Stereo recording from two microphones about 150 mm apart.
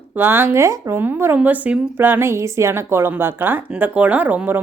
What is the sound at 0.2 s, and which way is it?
Speech, 15° right (ahead or behind).